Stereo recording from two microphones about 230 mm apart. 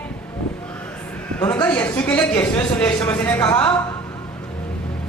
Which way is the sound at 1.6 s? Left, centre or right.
Centre.